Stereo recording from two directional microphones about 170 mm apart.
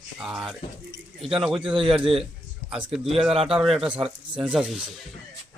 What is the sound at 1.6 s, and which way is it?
Speech, 30° right (ahead or behind).